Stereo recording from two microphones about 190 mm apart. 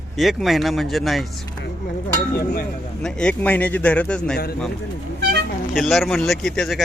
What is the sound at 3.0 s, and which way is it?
A man's voice, 5° left (ahead or behind).